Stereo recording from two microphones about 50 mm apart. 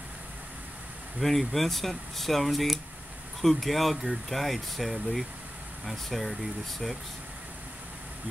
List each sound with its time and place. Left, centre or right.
1.2 s speech: centre